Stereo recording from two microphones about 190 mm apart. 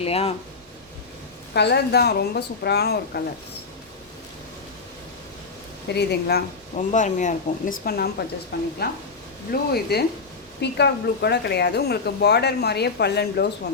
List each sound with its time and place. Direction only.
0.0 s speech: 30° left (ahead or behind)
1.5 s speech: 60° left (ahead or behind)
5.9 s speech: 60° left (ahead or behind)
6.7 s speech: 40° left (ahead or behind); by 13.5 s 60° left (ahead or behind)